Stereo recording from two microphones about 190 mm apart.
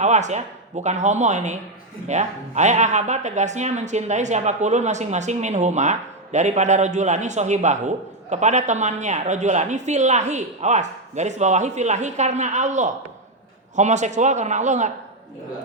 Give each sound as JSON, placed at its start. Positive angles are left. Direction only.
{"t": 0.0, "sound": "speech", "side_deg": -40}